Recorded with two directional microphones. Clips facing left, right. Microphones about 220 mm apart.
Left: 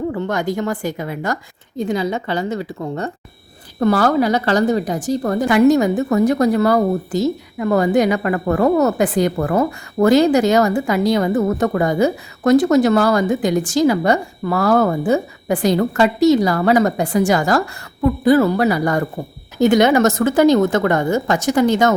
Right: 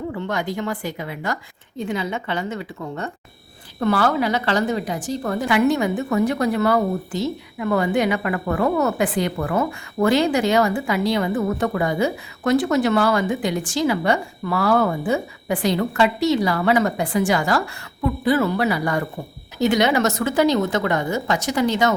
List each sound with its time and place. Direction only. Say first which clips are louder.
0.1 s a woman's voice: left 5 dB; 45° left (ahead or behind)